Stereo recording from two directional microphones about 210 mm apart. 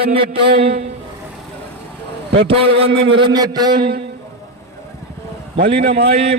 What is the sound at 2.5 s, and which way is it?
A man's voice, 25° right (ahead or behind).